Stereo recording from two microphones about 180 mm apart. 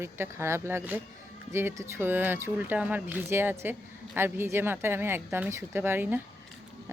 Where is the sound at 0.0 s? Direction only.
15° right (ahead or behind).